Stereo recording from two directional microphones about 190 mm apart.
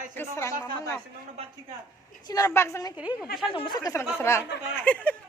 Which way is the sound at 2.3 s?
20° left (ahead or behind).